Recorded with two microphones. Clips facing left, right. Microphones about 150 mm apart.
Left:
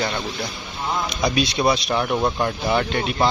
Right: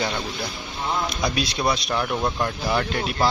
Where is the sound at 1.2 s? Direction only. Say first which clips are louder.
Left 4 dB; centre (ahead or behind).